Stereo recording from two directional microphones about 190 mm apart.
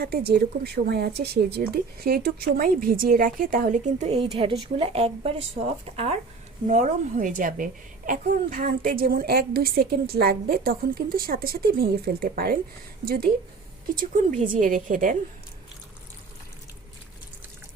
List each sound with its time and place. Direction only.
0.0 s a child's voice: 55° right (ahead or behind)
14.5 s a child's voice: 45° right (ahead or behind)